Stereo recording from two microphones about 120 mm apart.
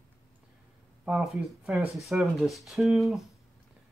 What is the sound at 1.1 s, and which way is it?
Speech, 5° right (ahead or behind).